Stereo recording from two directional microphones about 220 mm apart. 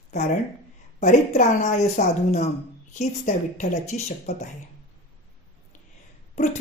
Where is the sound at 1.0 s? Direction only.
30° left (ahead or behind).